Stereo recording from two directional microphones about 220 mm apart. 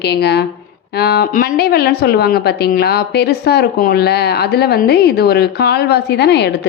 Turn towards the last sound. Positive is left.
turn(degrees=50)  # may be behind; listen again after turning